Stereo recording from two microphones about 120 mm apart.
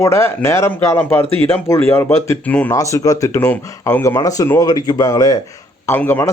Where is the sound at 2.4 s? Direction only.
10° left (ahead or behind).